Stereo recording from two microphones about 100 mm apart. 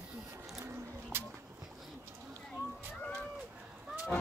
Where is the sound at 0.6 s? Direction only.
20° right (ahead or behind).